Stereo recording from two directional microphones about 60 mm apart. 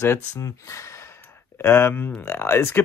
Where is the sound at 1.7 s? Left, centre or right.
Left.